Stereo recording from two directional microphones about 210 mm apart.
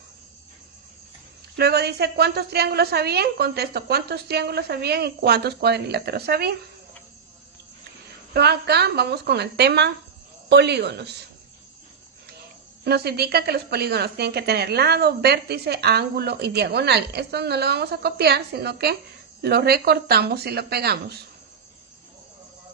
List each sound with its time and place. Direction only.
1.5 s a woman's voice: 50° right (ahead or behind)
8.3 s a woman's voice: 50° right (ahead or behind)
12.8 s a woman's voice: 50° right (ahead or behind)